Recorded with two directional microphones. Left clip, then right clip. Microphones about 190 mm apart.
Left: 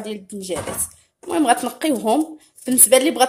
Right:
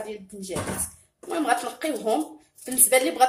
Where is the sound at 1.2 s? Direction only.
50° left (ahead or behind).